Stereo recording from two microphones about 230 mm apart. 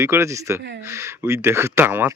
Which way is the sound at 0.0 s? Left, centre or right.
Centre.